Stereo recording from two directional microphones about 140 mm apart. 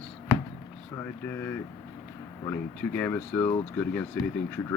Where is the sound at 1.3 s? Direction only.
15° left (ahead or behind).